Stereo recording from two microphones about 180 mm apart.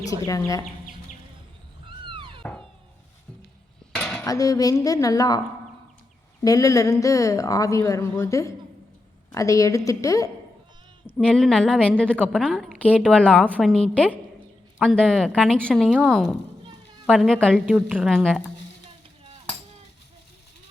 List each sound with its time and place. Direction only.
0.3 s speech: 20° left (ahead or behind)
2.0 s cat: 30° right (ahead or behind)
2.4 s music: 5° left (ahead or behind)
3.9 s speech: 10° left (ahead or behind)
6.4 s a woman's voice: 20° left (ahead or behind)
11.3 s a woman's voice: centre (ahead or behind)
17.7 s a woman's voice: 5° right (ahead or behind)